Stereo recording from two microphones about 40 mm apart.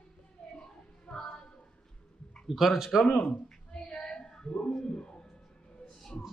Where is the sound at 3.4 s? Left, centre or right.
Left.